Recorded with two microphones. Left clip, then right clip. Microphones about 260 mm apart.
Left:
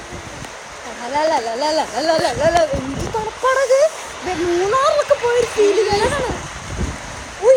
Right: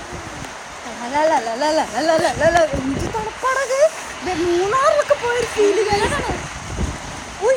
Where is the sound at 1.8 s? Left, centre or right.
Centre.